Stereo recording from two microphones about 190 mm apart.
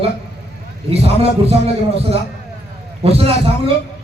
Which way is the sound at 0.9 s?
30° right (ahead or behind).